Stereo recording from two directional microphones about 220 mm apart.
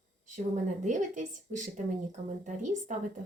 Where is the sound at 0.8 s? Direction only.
35° right (ahead or behind).